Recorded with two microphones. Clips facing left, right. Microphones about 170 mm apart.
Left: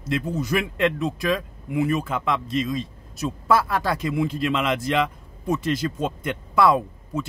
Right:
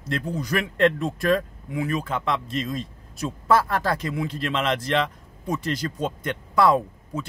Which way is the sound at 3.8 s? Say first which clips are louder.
Left 2 dB; 10° left (ahead or behind).